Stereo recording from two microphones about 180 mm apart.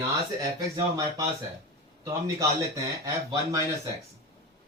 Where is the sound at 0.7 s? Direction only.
20° right (ahead or behind).